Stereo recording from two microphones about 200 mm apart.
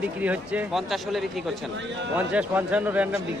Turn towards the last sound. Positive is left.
turn(degrees=-10)  # may be behind; listen again after turning